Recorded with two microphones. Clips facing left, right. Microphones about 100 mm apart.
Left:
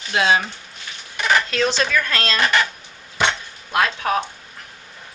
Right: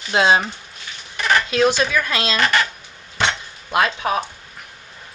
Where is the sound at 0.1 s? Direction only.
25° right (ahead or behind).